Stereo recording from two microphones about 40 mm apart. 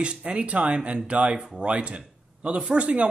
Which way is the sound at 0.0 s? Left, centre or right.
Right.